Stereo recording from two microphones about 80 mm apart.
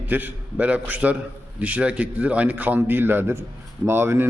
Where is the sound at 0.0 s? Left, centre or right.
Right.